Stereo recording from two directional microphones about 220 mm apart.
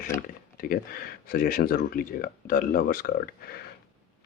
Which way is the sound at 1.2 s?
45° left (ahead or behind).